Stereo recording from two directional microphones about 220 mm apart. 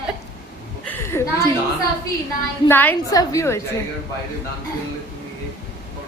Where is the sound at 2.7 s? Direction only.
10° left (ahead or behind).